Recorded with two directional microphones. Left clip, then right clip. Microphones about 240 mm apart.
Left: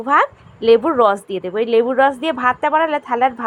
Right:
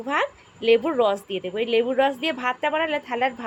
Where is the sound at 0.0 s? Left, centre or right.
Centre.